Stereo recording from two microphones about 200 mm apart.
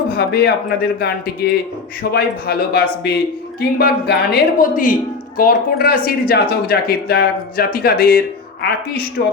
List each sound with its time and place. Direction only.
0.1 s speech: 50° left (ahead or behind)